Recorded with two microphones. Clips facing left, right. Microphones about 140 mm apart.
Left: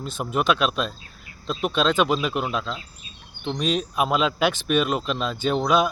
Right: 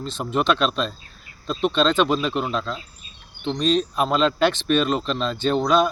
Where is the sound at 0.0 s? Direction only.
10° left (ahead or behind).